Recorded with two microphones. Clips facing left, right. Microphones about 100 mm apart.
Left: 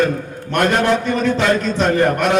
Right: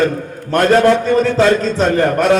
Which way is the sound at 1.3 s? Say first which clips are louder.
Right 4 dB; 35° right (ahead or behind).